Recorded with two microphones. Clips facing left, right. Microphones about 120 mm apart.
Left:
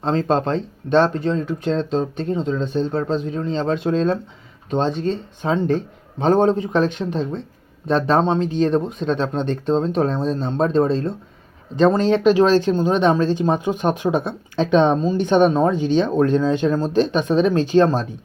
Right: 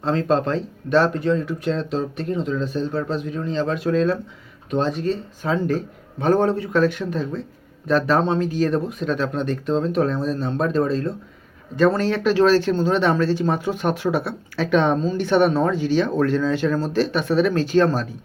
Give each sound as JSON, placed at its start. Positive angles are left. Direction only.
{"t": 0.0, "sound": "speech", "side_deg": 30}